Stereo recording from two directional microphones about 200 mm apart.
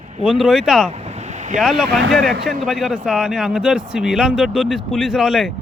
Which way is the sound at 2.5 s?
Centre (ahead or behind).